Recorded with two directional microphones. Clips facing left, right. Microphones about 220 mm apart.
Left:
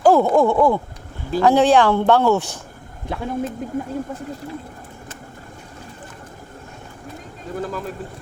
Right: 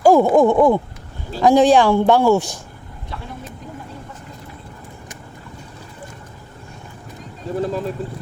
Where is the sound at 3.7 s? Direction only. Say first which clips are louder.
Left 11 dB; 50° left (ahead or behind).